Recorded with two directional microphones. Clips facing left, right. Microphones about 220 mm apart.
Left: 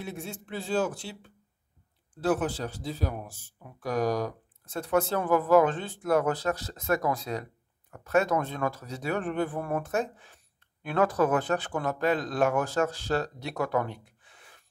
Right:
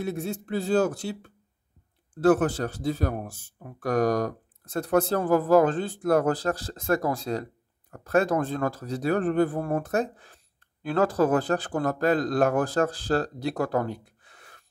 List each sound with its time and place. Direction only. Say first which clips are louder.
0.0 s speech: right 8 dB; 40° right (ahead or behind)